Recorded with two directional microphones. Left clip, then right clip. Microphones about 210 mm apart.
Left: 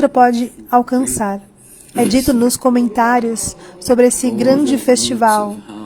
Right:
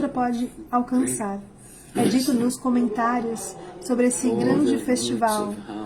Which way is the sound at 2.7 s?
35° left (ahead or behind).